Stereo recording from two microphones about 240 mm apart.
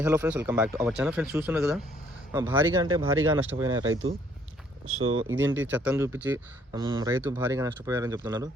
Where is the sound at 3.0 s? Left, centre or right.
Right.